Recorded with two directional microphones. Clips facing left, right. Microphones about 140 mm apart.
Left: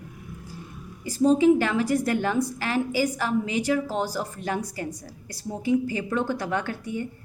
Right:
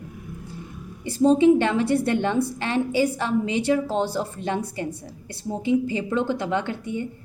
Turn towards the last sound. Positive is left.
turn(degrees=-20)  # may be behind; listen again after turning